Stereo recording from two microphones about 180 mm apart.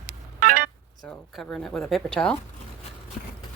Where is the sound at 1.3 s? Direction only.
5° left (ahead or behind).